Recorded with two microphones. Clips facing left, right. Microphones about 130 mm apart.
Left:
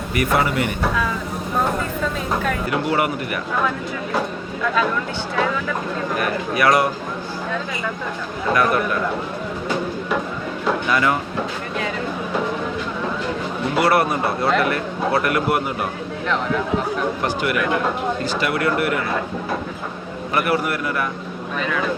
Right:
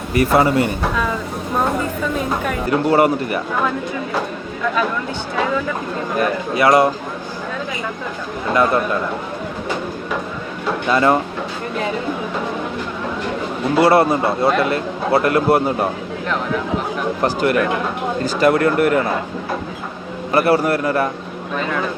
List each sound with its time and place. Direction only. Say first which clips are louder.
0.1 s a man's voice: right 5 dB; 30° right (ahead or behind)
2.6 s a man's voice: right 9 dB; 35° right (ahead or behind)
6.6 s speech: right 4 dB; 25° right (ahead or behind)
8.5 s speech: right 3 dB; 25° right (ahead or behind)
10.8 s a man's voice: right 7 dB; 30° right (ahead or behind)
13.7 s speech: right 5 dB; 25° right (ahead or behind)
17.2 s a man's voice: right 7 dB; 40° right (ahead or behind)
20.3 s a man's voice: right 6 dB; 35° right (ahead or behind)